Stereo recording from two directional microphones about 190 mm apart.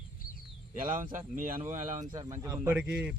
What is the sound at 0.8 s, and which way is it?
Speech, 45° right (ahead or behind).